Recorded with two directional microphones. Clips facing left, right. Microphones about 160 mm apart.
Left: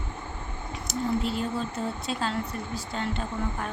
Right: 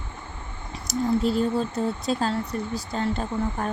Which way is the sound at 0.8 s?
40° right (ahead or behind).